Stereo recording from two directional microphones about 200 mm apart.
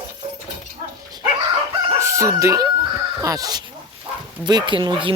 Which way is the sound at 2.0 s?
15° right (ahead or behind).